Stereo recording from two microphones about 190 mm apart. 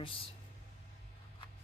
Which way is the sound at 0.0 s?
30° left (ahead or behind).